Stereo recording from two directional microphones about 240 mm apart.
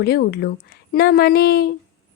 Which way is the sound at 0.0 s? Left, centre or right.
Left.